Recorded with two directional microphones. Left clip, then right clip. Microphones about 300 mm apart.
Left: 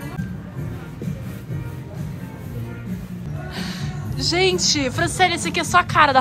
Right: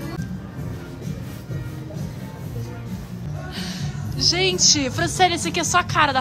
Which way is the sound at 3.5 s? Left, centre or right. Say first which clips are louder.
Left 1 dB; centre.